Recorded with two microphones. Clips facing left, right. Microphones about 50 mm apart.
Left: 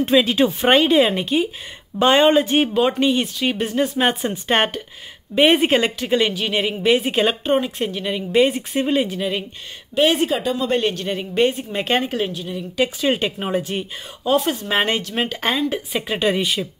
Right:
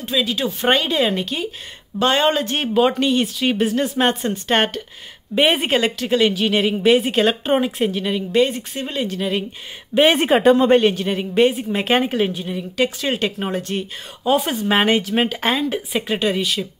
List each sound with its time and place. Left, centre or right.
0.0 s speech: left
0.7 s speech: left; by 7.3 s centre
7.4 s a woman's voice: centre
7.9 s speech: centre
8.3 s speech: centre
10.1 s speech: right
10.8 s a woman's voice: centre
12.7 s speech: centre
14.2 s a woman's voice: centre
16.3 s speech: centre